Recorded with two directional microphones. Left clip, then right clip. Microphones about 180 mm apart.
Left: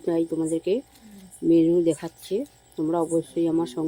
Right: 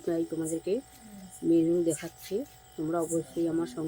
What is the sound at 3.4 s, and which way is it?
Speech, 35° left (ahead or behind).